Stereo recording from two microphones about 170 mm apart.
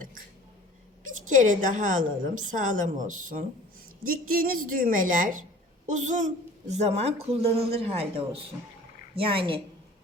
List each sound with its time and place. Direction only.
1.0 s a woman's voice: 50° right (ahead or behind); by 9.6 s 30° right (ahead or behind)